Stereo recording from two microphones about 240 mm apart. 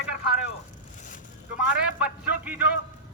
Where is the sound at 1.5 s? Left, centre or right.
Centre.